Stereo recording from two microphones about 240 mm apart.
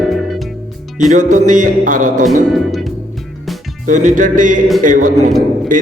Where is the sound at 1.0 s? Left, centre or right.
Right.